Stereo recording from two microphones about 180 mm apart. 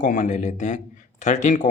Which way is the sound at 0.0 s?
45° left (ahead or behind).